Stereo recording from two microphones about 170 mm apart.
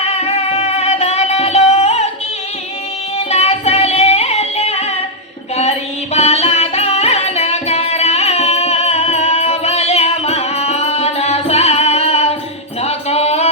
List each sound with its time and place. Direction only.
0.0 s music: 35° left (ahead or behind)
3.2 s music: 40° left (ahead or behind)
6.1 s music: 40° left (ahead or behind)